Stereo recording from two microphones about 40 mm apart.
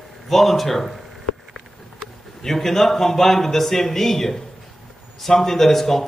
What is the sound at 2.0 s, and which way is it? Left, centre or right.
A man's voice, centre.